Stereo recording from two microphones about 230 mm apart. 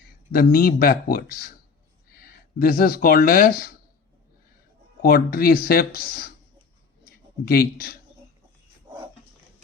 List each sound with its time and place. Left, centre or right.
0.3 s speech: left
5.0 s speech: left
7.0 s a sound: left